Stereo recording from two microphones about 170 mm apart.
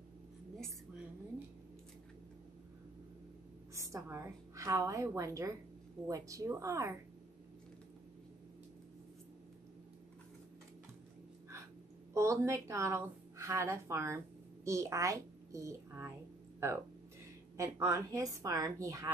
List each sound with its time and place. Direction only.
3.7 s a woman's voice: 20° right (ahead or behind)
12.1 s speech: 15° right (ahead or behind)
17.6 s a woman's voice: 15° right (ahead or behind)